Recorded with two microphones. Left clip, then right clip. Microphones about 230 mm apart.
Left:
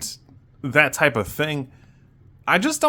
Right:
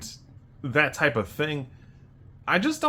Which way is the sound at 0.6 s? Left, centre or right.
Left.